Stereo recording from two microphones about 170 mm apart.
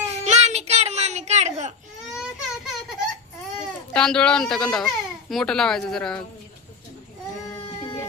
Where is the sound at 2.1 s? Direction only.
5° right (ahead or behind).